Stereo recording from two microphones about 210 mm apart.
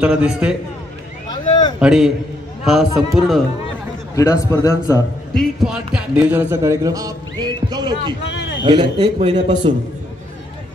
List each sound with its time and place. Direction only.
0.0 s speech: 5° right (ahead or behind)
1.3 s a sound: 20° left (ahead or behind)
1.8 s speech: 5° right (ahead or behind)
4.1 s a man's voice: 15° left (ahead or behind)
5.3 s a man's voice: centre (ahead or behind); by 8.2 s 20° right (ahead or behind)
8.3 s a sound: 60° left (ahead or behind)
8.6 s a man's voice: 20° right (ahead or behind)